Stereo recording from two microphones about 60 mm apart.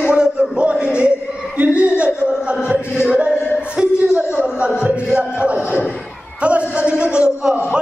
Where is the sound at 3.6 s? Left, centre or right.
Centre.